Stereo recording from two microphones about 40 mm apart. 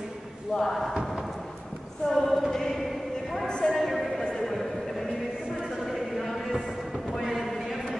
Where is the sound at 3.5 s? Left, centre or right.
Left.